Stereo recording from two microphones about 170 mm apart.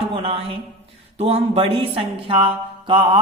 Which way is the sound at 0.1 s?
30° right (ahead or behind).